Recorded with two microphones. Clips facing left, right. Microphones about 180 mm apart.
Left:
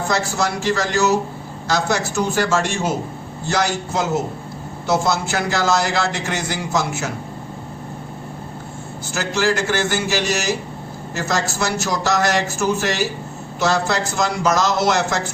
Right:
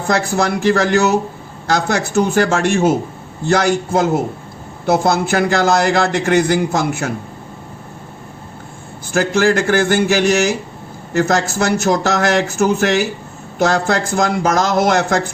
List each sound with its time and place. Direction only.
0.1 s a man's voice: 55° right (ahead or behind)
9.1 s a man's voice: 55° right (ahead or behind)